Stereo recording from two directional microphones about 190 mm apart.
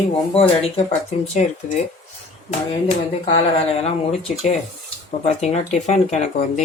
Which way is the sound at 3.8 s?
35° left (ahead or behind).